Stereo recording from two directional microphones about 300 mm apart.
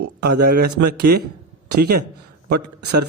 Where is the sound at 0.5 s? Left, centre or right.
Right.